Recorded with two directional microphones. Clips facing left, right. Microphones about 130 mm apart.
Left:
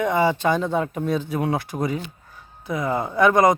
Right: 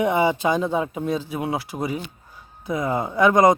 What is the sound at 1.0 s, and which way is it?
Speech, centre (ahead or behind).